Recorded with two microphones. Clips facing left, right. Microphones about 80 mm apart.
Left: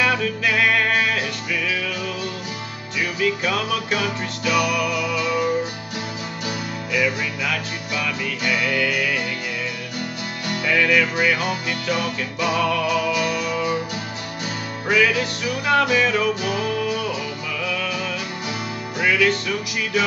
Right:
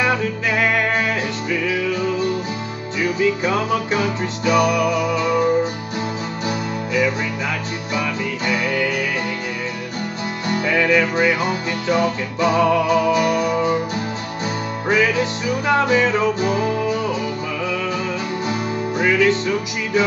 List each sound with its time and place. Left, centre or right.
0.0 s music: right
10.5 s music: right
14.9 s music: right
18.5 s music: right